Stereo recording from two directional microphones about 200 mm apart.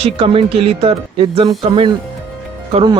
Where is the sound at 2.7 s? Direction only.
20° right (ahead or behind).